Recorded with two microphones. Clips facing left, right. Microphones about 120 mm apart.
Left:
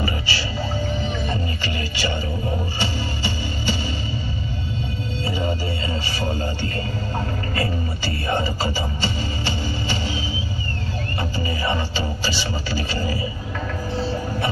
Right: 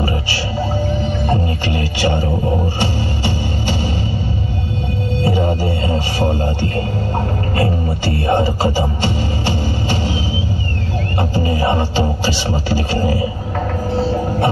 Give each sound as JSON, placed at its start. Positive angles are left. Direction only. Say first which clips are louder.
{"t": 1.2, "sound": "music", "louder": "right 8 dB", "side_deg": -60}
{"t": 5.2, "sound": "music", "louder": "right 8 dB", "side_deg": -60}
{"t": 8.0, "sound": "music", "louder": "right 8 dB", "side_deg": -60}
{"t": 11.1, "sound": "music", "louder": "right 9 dB", "side_deg": -55}